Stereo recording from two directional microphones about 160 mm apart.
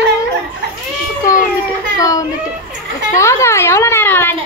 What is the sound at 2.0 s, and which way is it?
A woman's voice, 20° left (ahead or behind).